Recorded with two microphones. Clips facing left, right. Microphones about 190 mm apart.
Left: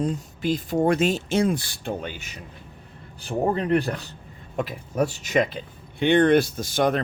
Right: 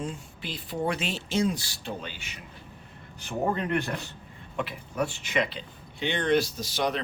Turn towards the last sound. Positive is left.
turn(degrees=50)  # may be behind; listen again after turning